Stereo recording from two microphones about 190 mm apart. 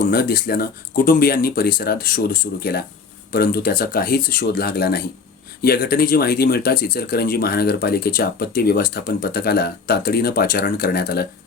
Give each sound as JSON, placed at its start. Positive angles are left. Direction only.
{"t": 0.0, "sound": "speech", "side_deg": 50}